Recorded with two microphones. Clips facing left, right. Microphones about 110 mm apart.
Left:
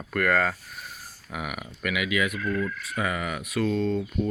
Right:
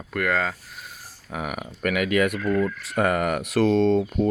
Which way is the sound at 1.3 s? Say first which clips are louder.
Right 4 dB; 35° right (ahead or behind).